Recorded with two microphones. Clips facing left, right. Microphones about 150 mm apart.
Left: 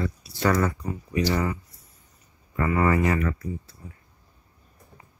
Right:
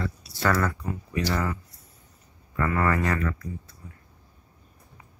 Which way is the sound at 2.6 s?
20° left (ahead or behind).